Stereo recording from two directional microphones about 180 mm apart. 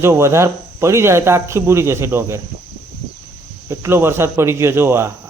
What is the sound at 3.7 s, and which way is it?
Speech, 15° right (ahead or behind).